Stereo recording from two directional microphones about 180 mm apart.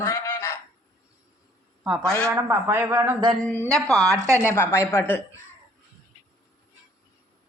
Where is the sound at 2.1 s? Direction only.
15° right (ahead or behind).